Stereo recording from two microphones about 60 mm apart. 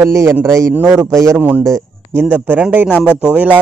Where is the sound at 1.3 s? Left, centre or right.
Right.